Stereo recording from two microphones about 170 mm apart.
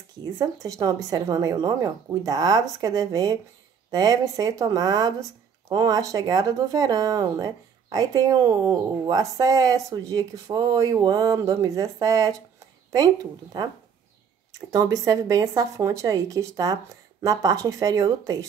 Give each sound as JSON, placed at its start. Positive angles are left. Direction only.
{"t": 0.2, "sound": "speech", "side_deg": -20}